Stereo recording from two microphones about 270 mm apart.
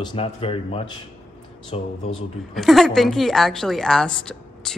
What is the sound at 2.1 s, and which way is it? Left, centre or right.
A woman's voice, centre.